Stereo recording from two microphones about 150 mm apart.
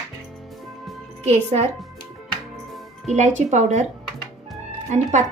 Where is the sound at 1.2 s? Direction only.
45° right (ahead or behind).